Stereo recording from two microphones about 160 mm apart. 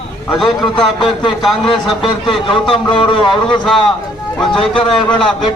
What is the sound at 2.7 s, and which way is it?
Speech, 30° left (ahead or behind).